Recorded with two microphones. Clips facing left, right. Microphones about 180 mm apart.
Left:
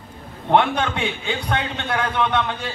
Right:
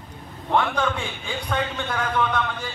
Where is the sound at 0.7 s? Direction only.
70° left (ahead or behind).